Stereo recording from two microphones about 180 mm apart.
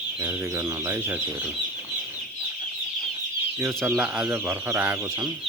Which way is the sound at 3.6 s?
10° right (ahead or behind).